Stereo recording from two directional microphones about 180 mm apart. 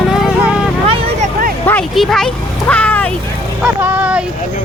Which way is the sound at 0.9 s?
30° right (ahead or behind).